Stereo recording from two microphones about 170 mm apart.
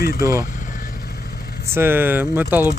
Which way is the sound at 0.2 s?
20° right (ahead or behind).